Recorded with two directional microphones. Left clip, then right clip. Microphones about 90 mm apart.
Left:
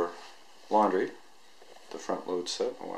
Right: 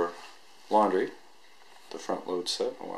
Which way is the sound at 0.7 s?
10° right (ahead or behind).